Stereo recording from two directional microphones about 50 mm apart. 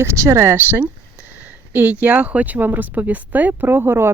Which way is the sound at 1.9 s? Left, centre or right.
Right.